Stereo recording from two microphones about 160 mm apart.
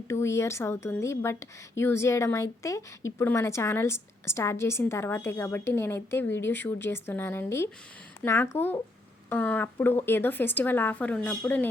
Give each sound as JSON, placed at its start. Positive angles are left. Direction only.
{"t": 0.1, "sound": "a woman's voice", "side_deg": 15}